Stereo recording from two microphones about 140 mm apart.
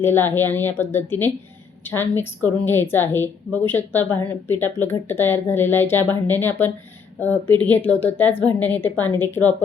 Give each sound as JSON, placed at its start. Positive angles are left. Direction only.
{"t": 0.0, "sound": "a woman's voice", "side_deg": 15}